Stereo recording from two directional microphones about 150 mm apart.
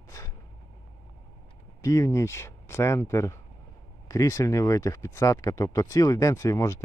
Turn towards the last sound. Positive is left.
turn(degrees=20)  # may be behind; listen again after turning